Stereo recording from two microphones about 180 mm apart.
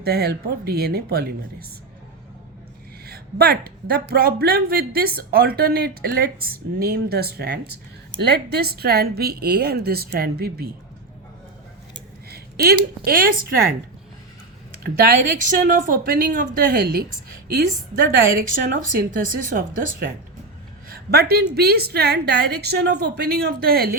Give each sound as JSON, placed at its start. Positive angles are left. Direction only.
{"t": 0.0, "sound": "speech", "side_deg": -60}
{"t": 3.1, "sound": "a sound", "side_deg": -60}
{"t": 4.1, "sound": "speech", "side_deg": -60}
{"t": 11.9, "sound": "a sound", "side_deg": -60}
{"t": 13.1, "sound": "a woman's voice", "side_deg": -55}
{"t": 14.8, "sound": "a woman's voice", "side_deg": -55}